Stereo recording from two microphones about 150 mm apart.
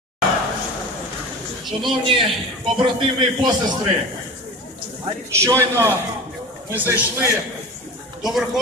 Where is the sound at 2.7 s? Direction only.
30° right (ahead or behind).